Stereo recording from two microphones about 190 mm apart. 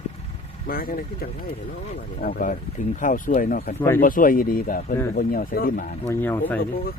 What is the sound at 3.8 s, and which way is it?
Speech, 10° left (ahead or behind).